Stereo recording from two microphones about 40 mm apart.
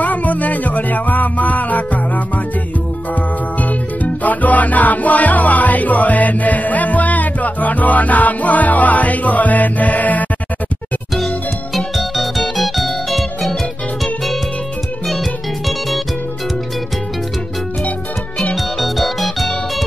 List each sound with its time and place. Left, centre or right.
0.0 s music: left
3.6 s music: left
11.1 s music: centre
18.8 s music: centre